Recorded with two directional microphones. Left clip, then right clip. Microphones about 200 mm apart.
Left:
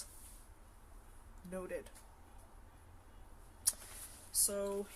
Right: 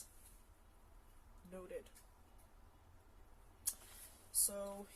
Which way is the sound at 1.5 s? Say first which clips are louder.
Left 7 dB; 20° left (ahead or behind).